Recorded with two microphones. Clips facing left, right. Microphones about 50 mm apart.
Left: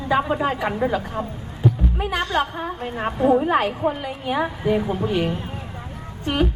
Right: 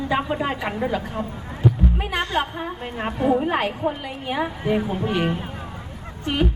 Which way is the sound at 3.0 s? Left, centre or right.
Centre.